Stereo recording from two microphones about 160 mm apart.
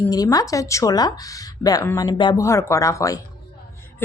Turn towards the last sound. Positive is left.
turn(degrees=20)  # may be behind; listen again after turning